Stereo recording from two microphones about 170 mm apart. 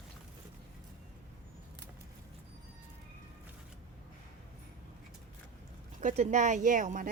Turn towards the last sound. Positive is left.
turn(degrees=-50)  # may be behind; listen again after turning